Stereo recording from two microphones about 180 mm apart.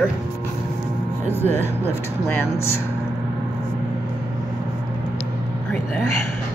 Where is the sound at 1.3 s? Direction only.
10° left (ahead or behind).